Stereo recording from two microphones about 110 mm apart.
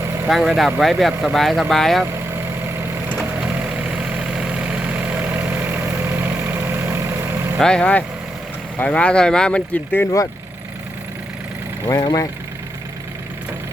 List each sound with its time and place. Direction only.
0.3 s speech: centre (ahead or behind)
3.2 s vehicle: 10° right (ahead or behind)
7.6 s speech: 10° left (ahead or behind)
11.9 s speech: 35° left (ahead or behind)